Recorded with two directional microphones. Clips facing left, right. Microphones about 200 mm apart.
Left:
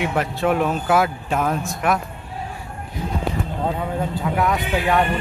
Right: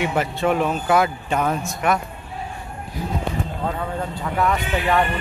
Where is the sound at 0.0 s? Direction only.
Centre (ahead or behind).